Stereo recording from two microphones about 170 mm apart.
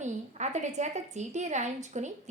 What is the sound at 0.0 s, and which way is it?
A woman's voice, 45° right (ahead or behind).